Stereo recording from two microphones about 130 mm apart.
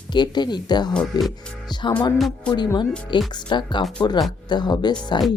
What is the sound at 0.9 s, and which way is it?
Speech, centre (ahead or behind).